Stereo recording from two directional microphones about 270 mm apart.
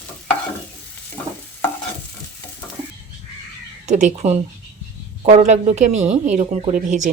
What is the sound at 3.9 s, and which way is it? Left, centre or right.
Stir, right.